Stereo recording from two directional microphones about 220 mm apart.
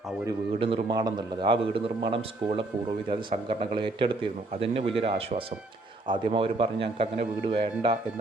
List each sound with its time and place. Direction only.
0.3 s a man's voice: 20° right (ahead or behind)